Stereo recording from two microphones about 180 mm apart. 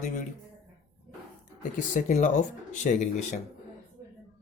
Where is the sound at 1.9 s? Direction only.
45° left (ahead or behind).